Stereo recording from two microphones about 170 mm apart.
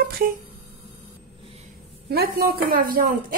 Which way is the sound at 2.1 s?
65° right (ahead or behind).